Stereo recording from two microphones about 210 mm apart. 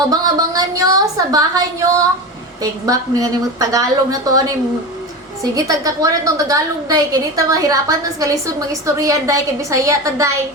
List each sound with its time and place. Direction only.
0.1 s a woman's voice: 15° right (ahead or behind)